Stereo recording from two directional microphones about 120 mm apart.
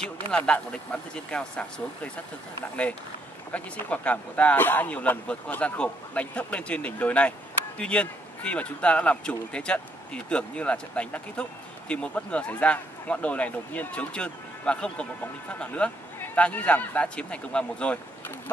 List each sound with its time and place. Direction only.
0.3 s speech: 10° left (ahead or behind)
3.5 s speech: 10° left (ahead or behind)